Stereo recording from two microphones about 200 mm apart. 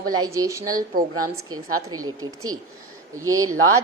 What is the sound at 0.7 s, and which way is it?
Speech, 45° right (ahead or behind).